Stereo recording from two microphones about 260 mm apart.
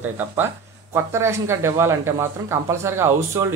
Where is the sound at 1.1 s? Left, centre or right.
Centre.